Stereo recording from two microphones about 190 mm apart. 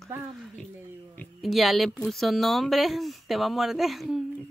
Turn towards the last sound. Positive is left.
turn(degrees=0)  # may be behind; listen again after turning